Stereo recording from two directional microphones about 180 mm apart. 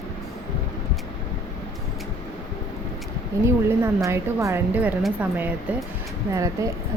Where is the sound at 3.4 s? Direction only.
15° right (ahead or behind).